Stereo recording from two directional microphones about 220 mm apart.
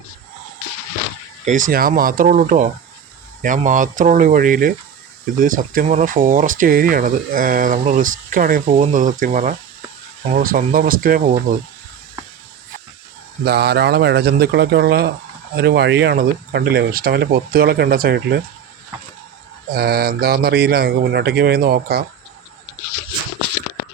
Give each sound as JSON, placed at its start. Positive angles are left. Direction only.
{"t": 1.5, "sound": "speech", "side_deg": -35}
{"t": 13.4, "sound": "speech", "side_deg": -50}
{"t": 19.7, "sound": "speech", "side_deg": -45}